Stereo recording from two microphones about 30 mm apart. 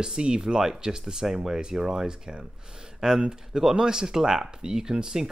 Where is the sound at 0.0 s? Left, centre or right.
Right.